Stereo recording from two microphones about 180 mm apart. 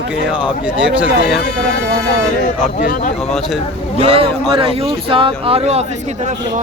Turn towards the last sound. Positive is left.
turn(degrees=-35)  # may be behind; listen again after turning